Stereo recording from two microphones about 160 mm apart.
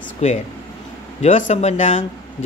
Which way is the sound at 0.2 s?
40° left (ahead or behind).